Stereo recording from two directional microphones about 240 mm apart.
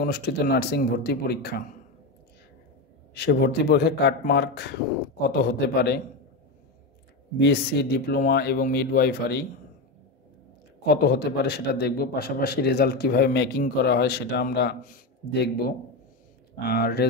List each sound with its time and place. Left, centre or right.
0.0 s a man's voice: left
3.2 s a man's voice: left
7.3 s a man's voice: left
10.9 s a man's voice: left